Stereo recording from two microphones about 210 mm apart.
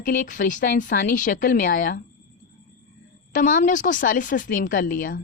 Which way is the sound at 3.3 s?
40° left (ahead or behind).